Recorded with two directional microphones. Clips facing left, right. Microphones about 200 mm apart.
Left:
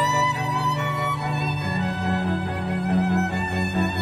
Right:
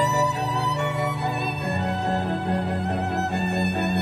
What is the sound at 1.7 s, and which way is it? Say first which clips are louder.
Music: right 1 dB; 30° right (ahead or behind).